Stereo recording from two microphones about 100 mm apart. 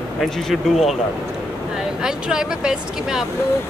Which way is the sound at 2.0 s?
5° right (ahead or behind).